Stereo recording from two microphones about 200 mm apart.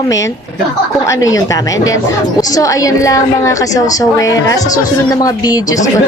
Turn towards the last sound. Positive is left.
turn(degrees=15)  # may be behind; listen again after turning